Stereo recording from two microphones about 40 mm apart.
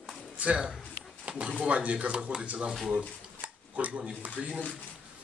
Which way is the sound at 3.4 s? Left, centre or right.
Right.